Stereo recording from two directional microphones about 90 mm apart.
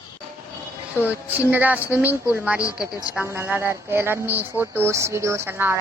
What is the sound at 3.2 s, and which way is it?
Speech, 30° right (ahead or behind).